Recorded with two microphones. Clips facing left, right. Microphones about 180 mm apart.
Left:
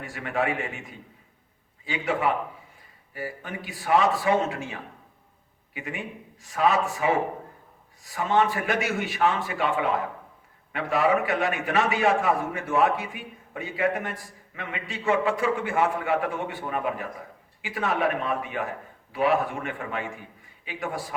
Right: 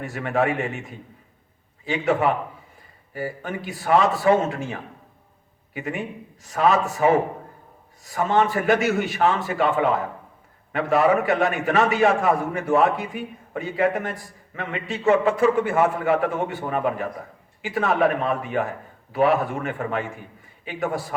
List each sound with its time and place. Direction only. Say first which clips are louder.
0.0 s a man's voice: right 5 dB; 45° right (ahead or behind)
1.9 s a man's voice: right 5 dB; 40° right (ahead or behind)